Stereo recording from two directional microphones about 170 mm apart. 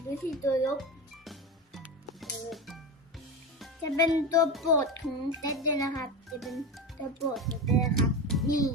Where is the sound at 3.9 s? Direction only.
20° left (ahead or behind).